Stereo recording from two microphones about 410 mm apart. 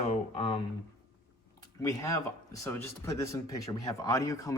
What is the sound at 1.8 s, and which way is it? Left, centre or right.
Speech, centre.